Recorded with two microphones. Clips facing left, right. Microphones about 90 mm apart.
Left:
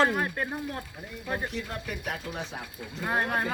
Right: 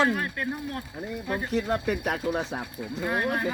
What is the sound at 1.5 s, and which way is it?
Speech, 45° right (ahead or behind).